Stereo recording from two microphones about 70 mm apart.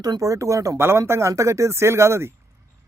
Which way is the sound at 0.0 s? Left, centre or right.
Right.